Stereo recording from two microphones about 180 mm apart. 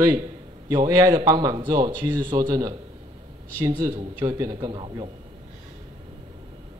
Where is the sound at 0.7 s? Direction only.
20° right (ahead or behind).